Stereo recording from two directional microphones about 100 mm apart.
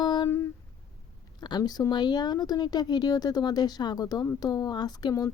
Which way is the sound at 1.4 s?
45° left (ahead or behind).